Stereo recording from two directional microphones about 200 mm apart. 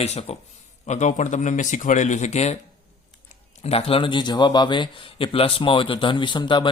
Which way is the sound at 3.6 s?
30° left (ahead or behind).